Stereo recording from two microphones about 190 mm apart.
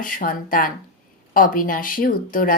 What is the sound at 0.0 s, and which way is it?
A woman's voice, 45° left (ahead or behind).